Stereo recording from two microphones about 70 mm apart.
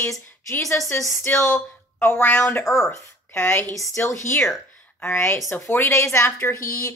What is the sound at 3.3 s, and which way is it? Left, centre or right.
A woman's voice, left.